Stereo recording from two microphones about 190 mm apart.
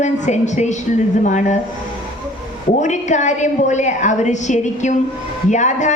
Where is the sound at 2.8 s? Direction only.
40° left (ahead or behind).